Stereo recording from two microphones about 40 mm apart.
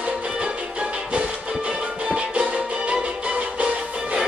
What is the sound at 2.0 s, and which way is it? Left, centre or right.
Music, right.